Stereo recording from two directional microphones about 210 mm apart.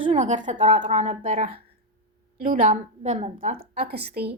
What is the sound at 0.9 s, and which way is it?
A woman's voice, 30° right (ahead or behind).